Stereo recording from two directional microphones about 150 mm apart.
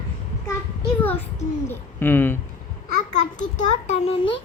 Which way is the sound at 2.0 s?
15° left (ahead or behind).